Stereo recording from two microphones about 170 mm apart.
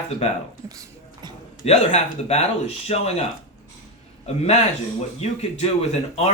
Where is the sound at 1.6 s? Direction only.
40° left (ahead or behind).